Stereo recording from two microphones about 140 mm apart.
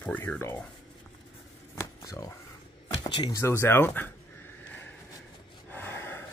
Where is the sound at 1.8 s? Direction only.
25° left (ahead or behind).